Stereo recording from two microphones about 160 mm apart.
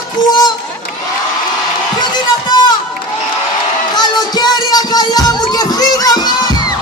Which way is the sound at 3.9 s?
25° left (ahead or behind).